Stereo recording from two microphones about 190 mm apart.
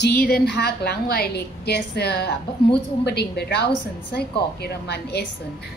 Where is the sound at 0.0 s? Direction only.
55° left (ahead or behind).